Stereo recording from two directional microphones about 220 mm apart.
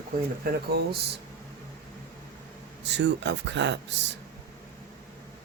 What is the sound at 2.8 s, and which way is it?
Speech, 50° right (ahead or behind).